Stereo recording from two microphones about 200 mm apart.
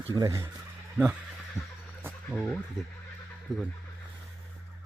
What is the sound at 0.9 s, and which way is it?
Speech, 5° right (ahead or behind).